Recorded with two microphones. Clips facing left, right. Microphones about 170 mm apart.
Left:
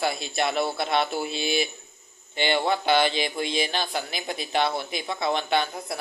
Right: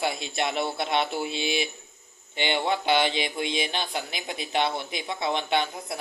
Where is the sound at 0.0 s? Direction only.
15° right (ahead or behind).